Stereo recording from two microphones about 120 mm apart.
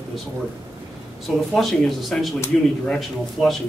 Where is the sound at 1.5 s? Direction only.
5° left (ahead or behind).